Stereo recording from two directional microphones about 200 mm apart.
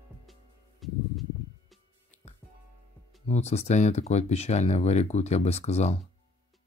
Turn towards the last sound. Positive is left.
turn(degrees=35)  # may be behind; listen again after turning